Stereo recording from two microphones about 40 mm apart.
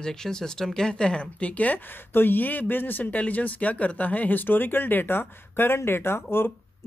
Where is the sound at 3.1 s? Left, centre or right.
Left.